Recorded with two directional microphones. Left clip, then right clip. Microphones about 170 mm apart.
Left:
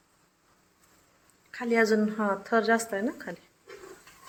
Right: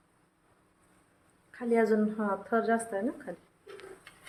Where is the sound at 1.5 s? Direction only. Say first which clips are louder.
Left 2 dB; 5° left (ahead or behind).